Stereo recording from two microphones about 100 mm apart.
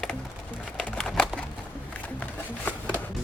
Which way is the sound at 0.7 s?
5° left (ahead or behind).